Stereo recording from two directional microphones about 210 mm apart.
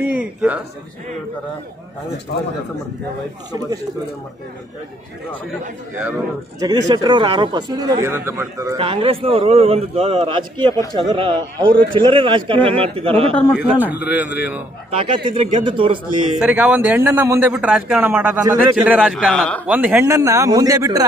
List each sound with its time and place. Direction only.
0.0 s speech: 5° right (ahead or behind)
6.6 s a man's voice: 20° right (ahead or behind)
8.7 s a man's voice: 25° right (ahead or behind)
13.7 s a man's voice: 5° right (ahead or behind)
14.9 s a man's voice: 25° right (ahead or behind)
16.3 s a man's voice: 5° right (ahead or behind)
19.6 s a man's voice: 5° right (ahead or behind)